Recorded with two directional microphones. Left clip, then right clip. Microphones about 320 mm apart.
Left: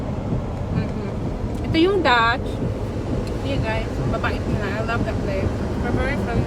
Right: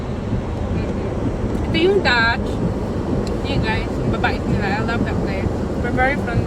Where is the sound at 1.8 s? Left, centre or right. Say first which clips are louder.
Right 1 dB; left.